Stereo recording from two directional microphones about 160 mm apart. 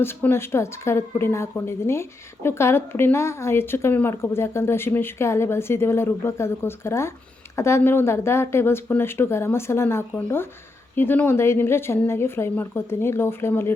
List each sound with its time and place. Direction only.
0.0 s a woman's voice: 15° left (ahead or behind)